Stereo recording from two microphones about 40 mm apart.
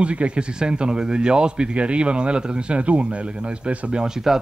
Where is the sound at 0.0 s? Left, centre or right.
Right.